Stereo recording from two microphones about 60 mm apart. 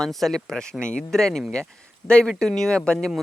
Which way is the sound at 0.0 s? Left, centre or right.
Centre.